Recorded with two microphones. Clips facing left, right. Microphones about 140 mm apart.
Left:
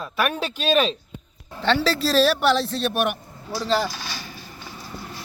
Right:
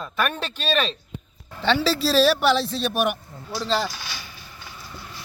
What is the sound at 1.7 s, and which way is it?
Speech, 5° right (ahead or behind).